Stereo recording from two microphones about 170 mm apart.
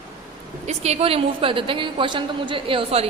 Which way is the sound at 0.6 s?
40° right (ahead or behind).